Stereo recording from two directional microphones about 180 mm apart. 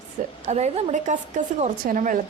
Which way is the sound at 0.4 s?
40° right (ahead or behind).